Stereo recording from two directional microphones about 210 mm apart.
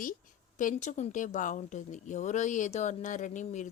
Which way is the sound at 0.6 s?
35° left (ahead or behind).